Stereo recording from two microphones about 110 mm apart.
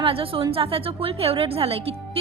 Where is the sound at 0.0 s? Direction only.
55° right (ahead or behind).